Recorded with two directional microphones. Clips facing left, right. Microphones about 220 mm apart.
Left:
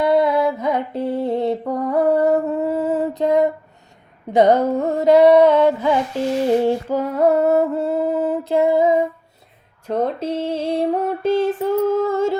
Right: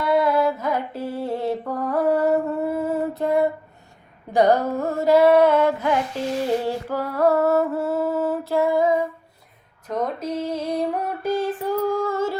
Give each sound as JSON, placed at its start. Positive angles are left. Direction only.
{"t": 0.0, "sound": "music", "side_deg": 20}
{"t": 0.7, "sound": "mantra", "side_deg": 65}
{"t": 1.1, "sound": "mantra", "side_deg": 20}
{"t": 4.3, "sound": "female singing", "side_deg": 20}
{"t": 6.7, "sound": "music", "side_deg": 20}